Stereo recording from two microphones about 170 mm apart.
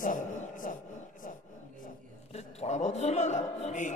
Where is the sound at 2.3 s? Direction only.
40° left (ahead or behind).